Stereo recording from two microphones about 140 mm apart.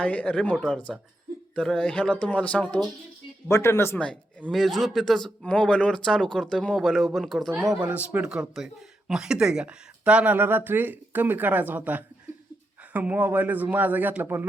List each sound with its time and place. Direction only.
0.0 s speech: 10° left (ahead or behind)
1.5 s speech: 5° left (ahead or behind)
3.9 s speech: 5° left (ahead or behind)
7.9 s speech: 10° right (ahead or behind)